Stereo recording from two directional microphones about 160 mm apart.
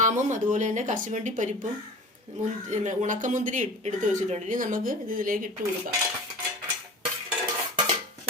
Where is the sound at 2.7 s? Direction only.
50° right (ahead or behind).